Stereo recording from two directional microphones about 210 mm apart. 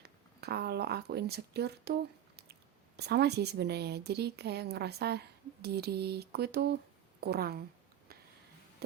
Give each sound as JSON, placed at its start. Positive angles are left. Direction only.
{"t": 0.0, "sound": "speech", "side_deg": -50}